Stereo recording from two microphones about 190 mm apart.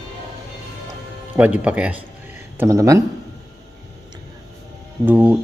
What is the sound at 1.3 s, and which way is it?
Speech, 5° right (ahead or behind).